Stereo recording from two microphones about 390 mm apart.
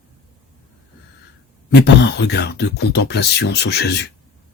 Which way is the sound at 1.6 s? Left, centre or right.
Left.